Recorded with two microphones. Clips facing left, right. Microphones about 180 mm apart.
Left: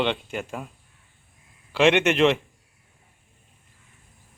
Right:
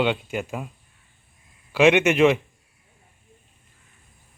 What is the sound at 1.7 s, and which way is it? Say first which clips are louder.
Speech: right 2 dB; 5° right (ahead or behind).